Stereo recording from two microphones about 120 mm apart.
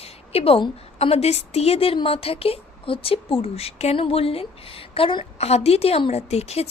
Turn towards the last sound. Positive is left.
turn(degrees=60)  # may be behind; listen again after turning